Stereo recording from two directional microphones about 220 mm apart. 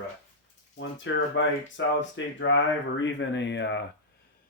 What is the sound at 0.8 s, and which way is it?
Speech, 60° left (ahead or behind).